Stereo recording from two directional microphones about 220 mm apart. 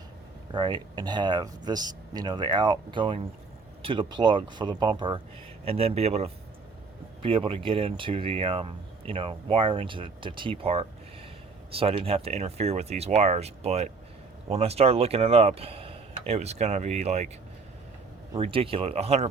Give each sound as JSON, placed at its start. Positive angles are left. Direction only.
{"t": 0.5, "sound": "speech", "side_deg": -20}
{"t": 18.3, "sound": "speech", "side_deg": -25}